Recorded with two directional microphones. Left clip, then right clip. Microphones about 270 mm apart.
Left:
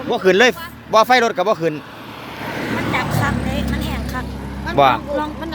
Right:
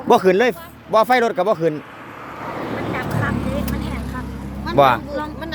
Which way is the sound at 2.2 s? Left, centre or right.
Left.